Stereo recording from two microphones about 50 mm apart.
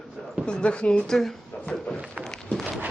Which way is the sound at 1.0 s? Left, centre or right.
Centre.